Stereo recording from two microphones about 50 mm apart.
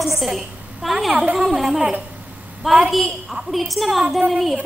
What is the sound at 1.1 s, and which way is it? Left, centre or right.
Speech, right.